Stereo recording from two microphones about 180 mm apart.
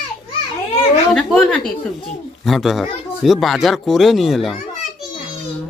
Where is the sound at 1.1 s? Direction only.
5° left (ahead or behind).